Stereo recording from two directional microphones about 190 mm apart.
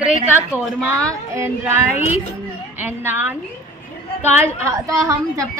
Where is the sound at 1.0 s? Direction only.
15° right (ahead or behind).